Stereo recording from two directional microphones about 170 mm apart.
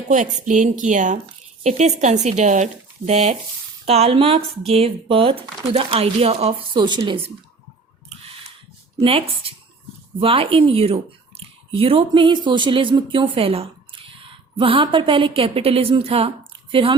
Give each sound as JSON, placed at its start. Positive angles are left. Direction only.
{"t": 0.1, "sound": "a woman's voice", "side_deg": -45}
{"t": 9.0, "sound": "a woman's voice", "side_deg": -35}
{"t": 16.5, "sound": "a sound", "side_deg": -30}